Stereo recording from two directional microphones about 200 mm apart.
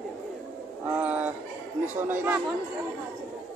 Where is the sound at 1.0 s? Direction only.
10° right (ahead or behind).